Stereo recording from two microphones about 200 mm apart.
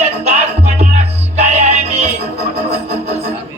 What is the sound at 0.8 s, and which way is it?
Music, 35° right (ahead or behind).